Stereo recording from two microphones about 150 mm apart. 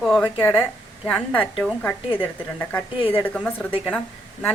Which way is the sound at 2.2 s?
15° left (ahead or behind).